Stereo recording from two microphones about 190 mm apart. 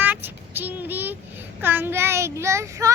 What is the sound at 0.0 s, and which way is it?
Child singing, 10° right (ahead or behind).